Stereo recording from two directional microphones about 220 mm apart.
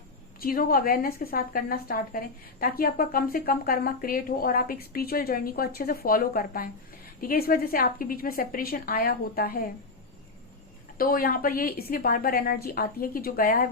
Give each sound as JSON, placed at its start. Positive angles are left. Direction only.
{"t": 0.3, "sound": "a woman's voice", "side_deg": 40}
{"t": 10.9, "sound": "a woman's voice", "side_deg": 40}